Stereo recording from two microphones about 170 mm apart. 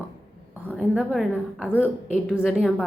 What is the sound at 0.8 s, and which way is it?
A woman's voice, 5° right (ahead or behind).